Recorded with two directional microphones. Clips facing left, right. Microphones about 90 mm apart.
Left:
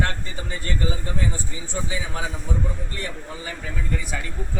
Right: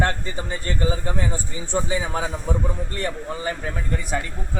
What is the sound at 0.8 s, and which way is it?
A man's voice, 35° right (ahead or behind).